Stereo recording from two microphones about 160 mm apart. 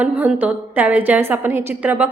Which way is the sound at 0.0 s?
10° right (ahead or behind).